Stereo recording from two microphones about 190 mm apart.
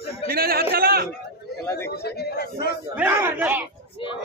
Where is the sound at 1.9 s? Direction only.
55° left (ahead or behind).